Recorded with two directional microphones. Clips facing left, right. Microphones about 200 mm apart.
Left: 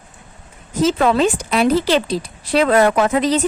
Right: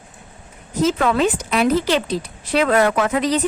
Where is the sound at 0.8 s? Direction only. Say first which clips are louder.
Left 2 dB; 30° left (ahead or behind).